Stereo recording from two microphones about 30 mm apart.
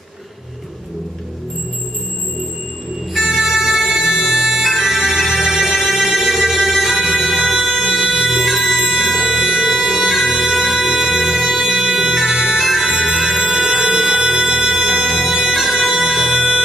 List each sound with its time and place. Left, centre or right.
3.3 s bagpipes: centre
7.0 s music: centre
8.7 s music: centre
12.3 s organ: centre
13.5 s music: centre
15.3 s bagpipes: centre
16.3 s music: centre